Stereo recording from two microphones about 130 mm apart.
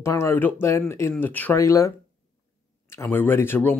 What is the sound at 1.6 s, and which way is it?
Speech, 25° left (ahead or behind).